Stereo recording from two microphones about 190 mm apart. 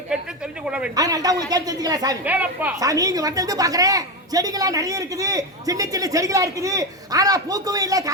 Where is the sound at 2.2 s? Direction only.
10° right (ahead or behind).